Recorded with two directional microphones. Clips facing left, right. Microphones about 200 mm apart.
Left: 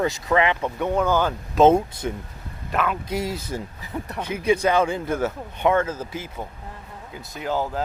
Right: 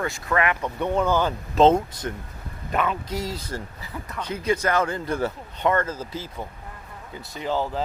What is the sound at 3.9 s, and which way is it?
Speech, 30° left (ahead or behind).